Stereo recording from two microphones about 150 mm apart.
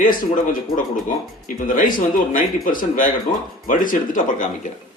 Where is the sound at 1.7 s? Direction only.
65° left (ahead or behind).